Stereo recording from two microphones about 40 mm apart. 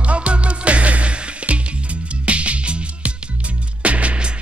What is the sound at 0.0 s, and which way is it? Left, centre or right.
Music, right.